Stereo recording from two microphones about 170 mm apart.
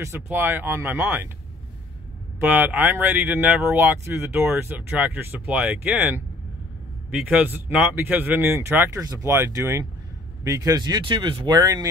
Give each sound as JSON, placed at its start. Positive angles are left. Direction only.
{"t": 0.0, "sound": "speech", "side_deg": -15}
{"t": 2.4, "sound": "speech", "side_deg": -10}